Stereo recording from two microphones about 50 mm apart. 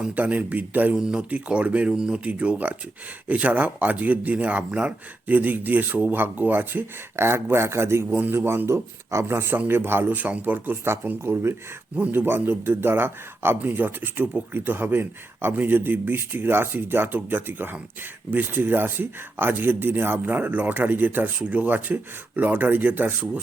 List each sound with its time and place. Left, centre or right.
0.1 s speech: right
0.9 s speech: centre
1.3 s speech: right
1.9 s speech: centre
2.2 s speech: right
7.2 s speech: right
9.5 s speech: right
10.1 s speech: right
11.2 s speech: right
13.6 s speech: right